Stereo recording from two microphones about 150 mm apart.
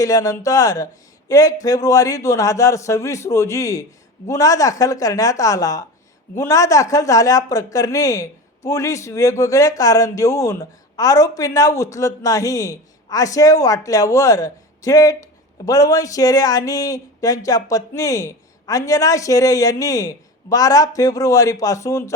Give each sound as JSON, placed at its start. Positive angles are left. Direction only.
{"t": 0.0, "sound": "speech", "side_deg": 20}